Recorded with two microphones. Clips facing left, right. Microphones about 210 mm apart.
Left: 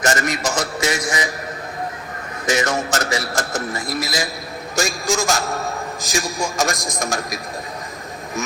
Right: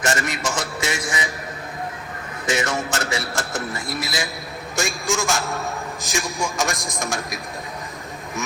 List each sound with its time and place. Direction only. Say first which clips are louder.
0.0 s a man's voice: left 3 dB; 40° left (ahead or behind)
2.5 s a man's voice: left 3 dB; 40° left (ahead or behind)